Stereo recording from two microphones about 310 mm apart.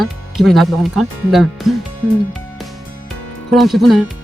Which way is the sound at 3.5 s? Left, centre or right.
Centre.